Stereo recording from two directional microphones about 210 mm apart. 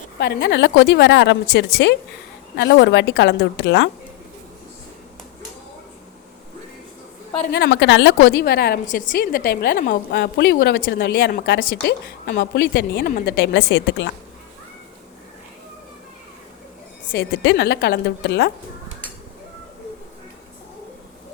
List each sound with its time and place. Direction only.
0.2 s a woman's voice: 50° left (ahead or behind)
7.5 s a woman's voice: 55° left (ahead or behind)
17.1 s a woman's voice: 60° left (ahead or behind)